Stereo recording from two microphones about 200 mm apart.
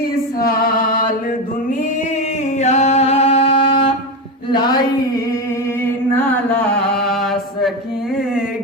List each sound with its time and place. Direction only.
0.3 s music: 45° left (ahead or behind)
2.6 s a sound: 35° left (ahead or behind)
5.8 s chant: 10° left (ahead or behind)